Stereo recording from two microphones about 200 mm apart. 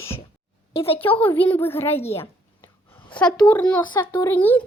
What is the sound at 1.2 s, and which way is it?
Speech, 10° left (ahead or behind).